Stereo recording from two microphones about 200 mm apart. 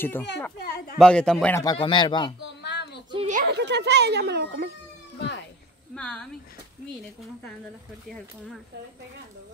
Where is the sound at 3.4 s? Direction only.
55° right (ahead or behind).